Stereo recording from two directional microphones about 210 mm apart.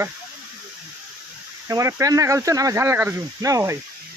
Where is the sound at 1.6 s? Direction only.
15° right (ahead or behind).